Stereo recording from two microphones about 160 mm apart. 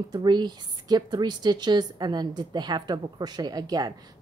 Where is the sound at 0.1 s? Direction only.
25° right (ahead or behind).